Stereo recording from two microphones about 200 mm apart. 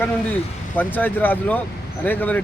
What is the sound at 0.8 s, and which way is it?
Speech, 10° left (ahead or behind).